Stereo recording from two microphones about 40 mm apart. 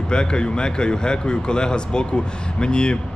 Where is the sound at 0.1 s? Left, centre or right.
Left.